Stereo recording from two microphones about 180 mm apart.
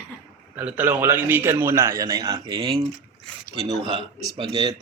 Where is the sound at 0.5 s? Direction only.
10° right (ahead or behind).